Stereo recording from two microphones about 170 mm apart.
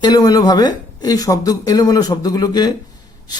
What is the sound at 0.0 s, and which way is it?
A woman's voice, 20° left (ahead or behind).